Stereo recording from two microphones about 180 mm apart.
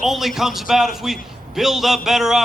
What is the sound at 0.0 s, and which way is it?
A man's voice, centre (ahead or behind).